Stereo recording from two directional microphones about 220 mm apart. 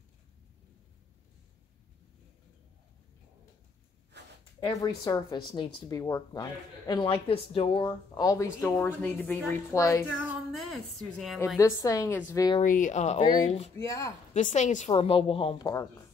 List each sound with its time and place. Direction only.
4.1 s a sound: 50° right (ahead or behind)
4.6 s a woman's voice: 15° left (ahead or behind)
10.2 s speech: centre (ahead or behind)
11.3 s a woman's voice: 10° left (ahead or behind)
12.6 s speech: 35° left (ahead or behind)
13.7 s a woman's voice: 15° left (ahead or behind)
14.3 s speech: 35° left (ahead or behind); by 15.9 s 15° left (ahead or behind)